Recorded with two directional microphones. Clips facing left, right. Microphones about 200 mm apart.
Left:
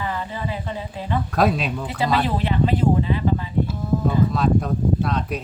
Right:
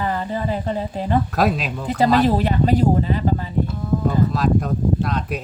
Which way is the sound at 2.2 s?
40° right (ahead or behind).